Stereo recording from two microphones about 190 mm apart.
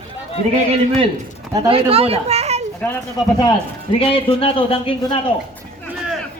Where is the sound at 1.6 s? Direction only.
30° right (ahead or behind).